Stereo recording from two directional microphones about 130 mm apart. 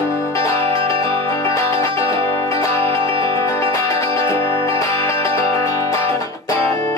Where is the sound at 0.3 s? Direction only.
20° left (ahead or behind).